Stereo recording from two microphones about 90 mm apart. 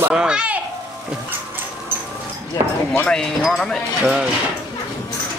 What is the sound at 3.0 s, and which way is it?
Speech, 5° left (ahead or behind).